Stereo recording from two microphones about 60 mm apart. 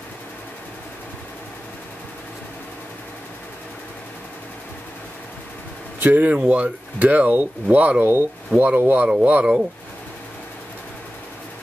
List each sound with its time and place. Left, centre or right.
5.9 s speech: right
8.0 s speech: right
8.5 s speech: right